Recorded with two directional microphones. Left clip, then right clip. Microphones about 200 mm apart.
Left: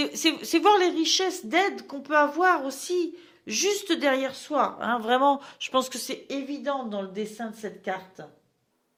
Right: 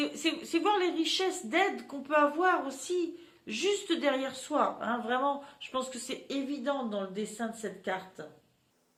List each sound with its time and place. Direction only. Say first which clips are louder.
0.2 s a woman's voice: left 11 dB; 50° left (ahead or behind)
6.1 s speech: left 3 dB; 35° left (ahead or behind)